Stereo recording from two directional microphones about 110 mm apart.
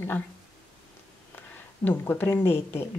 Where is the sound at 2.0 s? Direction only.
20° left (ahead or behind).